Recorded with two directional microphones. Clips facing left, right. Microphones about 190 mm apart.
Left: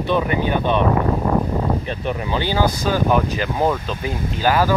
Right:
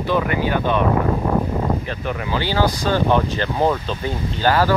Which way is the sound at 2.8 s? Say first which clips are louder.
Even; 10° left (ahead or behind).